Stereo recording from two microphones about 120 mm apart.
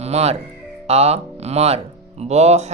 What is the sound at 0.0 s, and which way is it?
Speech, 60° right (ahead or behind).